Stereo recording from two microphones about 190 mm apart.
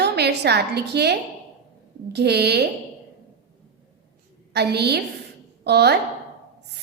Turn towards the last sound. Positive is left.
turn(degrees=-60)  # may be behind; listen again after turning